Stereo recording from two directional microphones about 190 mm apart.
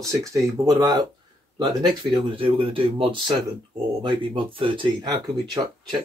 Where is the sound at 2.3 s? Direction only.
30° right (ahead or behind).